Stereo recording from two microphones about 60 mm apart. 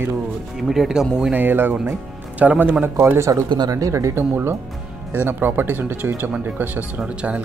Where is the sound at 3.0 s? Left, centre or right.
Right.